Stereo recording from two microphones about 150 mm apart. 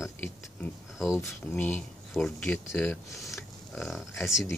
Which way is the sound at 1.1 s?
10° left (ahead or behind).